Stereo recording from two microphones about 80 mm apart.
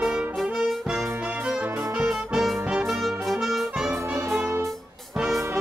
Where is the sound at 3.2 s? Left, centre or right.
Centre.